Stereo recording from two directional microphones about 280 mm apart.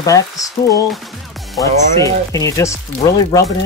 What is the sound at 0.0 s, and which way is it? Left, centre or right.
Speech, centre.